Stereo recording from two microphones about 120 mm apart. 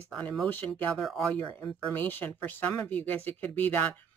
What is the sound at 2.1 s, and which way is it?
Speech, 15° left (ahead or behind).